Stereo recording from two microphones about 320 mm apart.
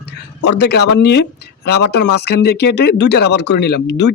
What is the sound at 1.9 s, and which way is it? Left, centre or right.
Speech, left.